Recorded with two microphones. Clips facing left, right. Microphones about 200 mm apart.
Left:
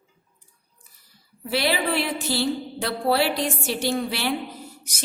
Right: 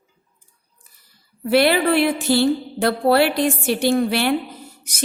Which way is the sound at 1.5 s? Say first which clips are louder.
Right 8 dB; 60° right (ahead or behind).